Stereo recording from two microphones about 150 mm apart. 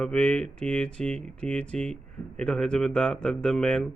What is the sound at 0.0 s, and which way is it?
Speech, 5° left (ahead or behind).